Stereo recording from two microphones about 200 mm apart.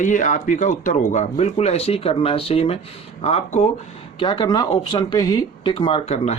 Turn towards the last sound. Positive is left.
turn(degrees=30)  # may be behind; listen again after turning